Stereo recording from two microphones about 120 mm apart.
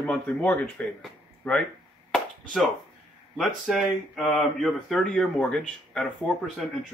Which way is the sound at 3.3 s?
Centre (ahead or behind).